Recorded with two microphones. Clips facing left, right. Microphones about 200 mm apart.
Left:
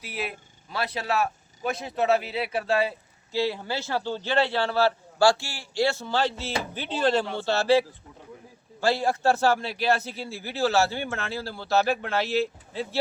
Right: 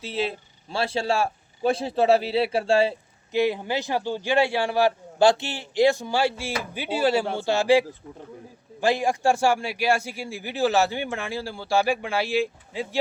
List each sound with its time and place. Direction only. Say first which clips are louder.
0.0 s a man's voice: right 6 dB; 25° right (ahead or behind)
3.3 s a man's voice: right 4 dB; 15° right (ahead or behind)